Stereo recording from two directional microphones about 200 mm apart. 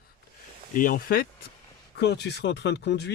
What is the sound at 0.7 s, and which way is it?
Speech, 45° left (ahead or behind).